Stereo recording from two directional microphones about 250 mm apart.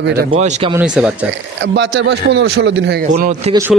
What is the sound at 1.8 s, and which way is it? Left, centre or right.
A man's voice, right.